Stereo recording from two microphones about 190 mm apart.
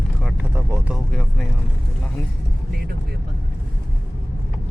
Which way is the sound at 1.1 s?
5° left (ahead or behind).